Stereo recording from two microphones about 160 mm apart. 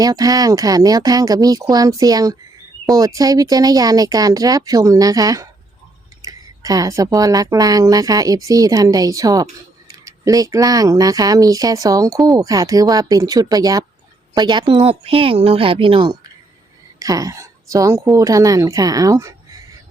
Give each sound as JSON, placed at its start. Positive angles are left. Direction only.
{"t": 0.0, "sound": "speech", "side_deg": -25}
{"t": 17.0, "sound": "speech", "side_deg": -20}